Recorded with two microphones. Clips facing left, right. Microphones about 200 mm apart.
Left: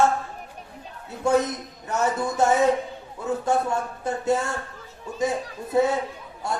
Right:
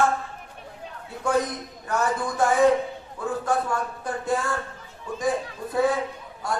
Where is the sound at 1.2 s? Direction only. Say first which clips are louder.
Left 3 dB; 25° left (ahead or behind).